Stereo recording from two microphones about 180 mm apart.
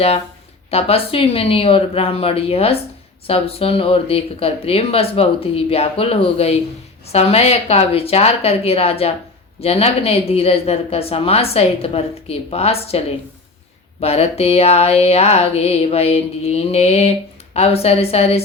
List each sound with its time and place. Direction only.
0.7 s speech: 35° left (ahead or behind)
14.0 s speech: 35° left (ahead or behind)